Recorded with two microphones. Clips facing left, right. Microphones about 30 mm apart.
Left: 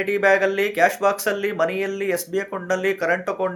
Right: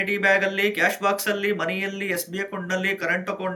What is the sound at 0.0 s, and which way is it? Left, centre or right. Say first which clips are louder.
Speech: left 3 dB; right.